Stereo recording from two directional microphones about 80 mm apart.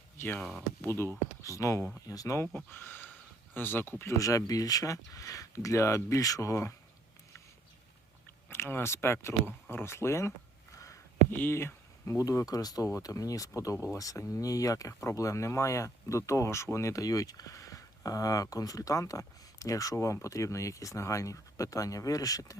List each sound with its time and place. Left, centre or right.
0.8 s speech: left
2.6 s speech: left
8.4 s speech: left
12.5 s speech: left